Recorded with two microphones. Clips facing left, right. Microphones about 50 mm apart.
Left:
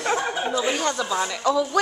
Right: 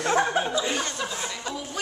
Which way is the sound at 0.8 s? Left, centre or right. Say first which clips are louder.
Left 7 dB; left.